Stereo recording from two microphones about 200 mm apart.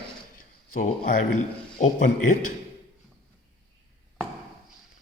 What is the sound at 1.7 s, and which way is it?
Speech, 40° left (ahead or behind).